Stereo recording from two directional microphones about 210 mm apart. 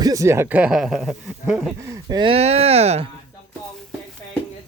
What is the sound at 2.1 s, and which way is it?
Speech, 25° right (ahead or behind).